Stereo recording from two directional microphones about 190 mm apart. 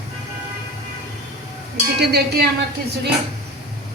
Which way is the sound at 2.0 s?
60° right (ahead or behind).